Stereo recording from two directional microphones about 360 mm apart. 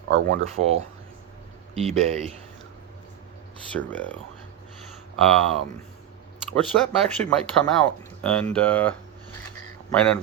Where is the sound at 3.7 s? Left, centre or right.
Centre.